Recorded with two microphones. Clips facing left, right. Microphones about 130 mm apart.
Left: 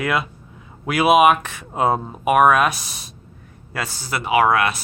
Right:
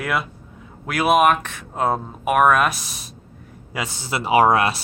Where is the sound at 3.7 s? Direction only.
20° right (ahead or behind).